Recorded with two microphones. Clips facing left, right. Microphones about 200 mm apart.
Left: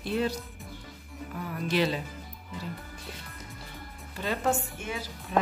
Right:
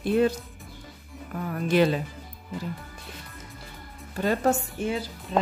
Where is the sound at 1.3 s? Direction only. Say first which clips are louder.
Right 6 dB; 50° right (ahead or behind).